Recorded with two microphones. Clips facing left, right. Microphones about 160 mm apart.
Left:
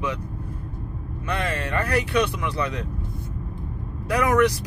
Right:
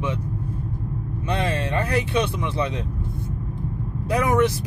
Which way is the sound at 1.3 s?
25° right (ahead or behind).